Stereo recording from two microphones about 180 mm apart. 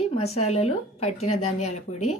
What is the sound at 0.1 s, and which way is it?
Speech, 35° left (ahead or behind).